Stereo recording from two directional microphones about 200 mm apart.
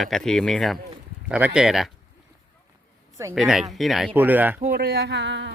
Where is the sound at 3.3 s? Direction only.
Centre (ahead or behind).